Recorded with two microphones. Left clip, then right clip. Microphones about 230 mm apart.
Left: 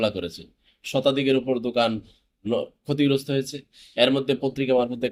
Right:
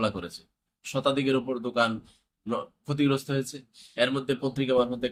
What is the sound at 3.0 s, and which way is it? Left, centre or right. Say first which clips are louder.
Speech: left 4 dB; centre.